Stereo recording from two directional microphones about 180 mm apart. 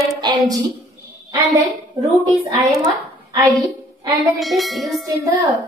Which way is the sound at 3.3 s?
20° right (ahead or behind).